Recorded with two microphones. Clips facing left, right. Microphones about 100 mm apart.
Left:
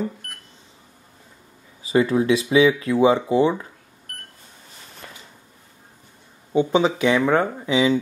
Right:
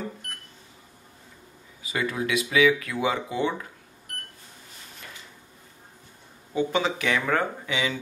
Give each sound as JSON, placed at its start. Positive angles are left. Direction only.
{"t": 1.8, "sound": "speech", "side_deg": 30}
{"t": 6.5, "sound": "speech", "side_deg": 25}